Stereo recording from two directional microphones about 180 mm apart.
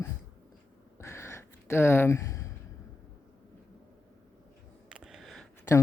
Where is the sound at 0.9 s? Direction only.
15° left (ahead or behind).